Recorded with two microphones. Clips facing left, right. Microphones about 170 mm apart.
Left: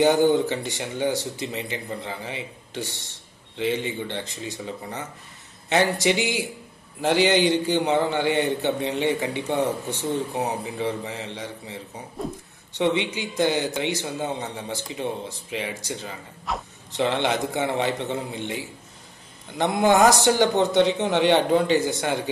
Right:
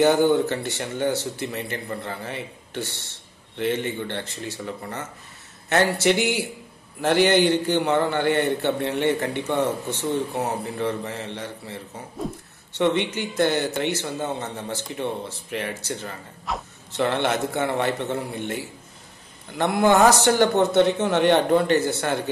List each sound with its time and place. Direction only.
0.0 s speech: 15° left (ahead or behind)
16.5 s speech: centre (ahead or behind)
16.9 s speech: 15° left (ahead or behind)